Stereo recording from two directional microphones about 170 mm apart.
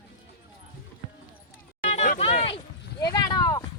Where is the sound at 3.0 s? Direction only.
20° left (ahead or behind).